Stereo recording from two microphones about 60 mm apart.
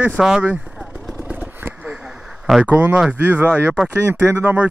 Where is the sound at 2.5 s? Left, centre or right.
Centre.